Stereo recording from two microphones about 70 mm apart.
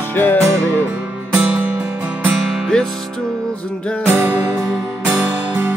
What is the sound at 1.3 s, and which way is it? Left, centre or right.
Music, right.